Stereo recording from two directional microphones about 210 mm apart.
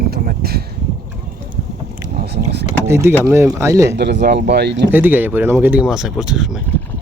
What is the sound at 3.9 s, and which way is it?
Speech, 55° right (ahead or behind).